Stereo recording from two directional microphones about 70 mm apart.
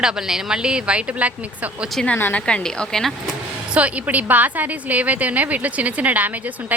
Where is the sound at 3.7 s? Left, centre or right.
Right.